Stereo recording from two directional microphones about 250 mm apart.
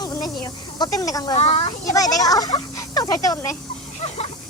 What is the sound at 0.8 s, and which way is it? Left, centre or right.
Speech, centre.